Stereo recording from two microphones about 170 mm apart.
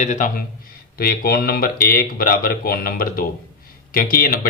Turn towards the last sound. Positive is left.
turn(degrees=60)  # may be behind; listen again after turning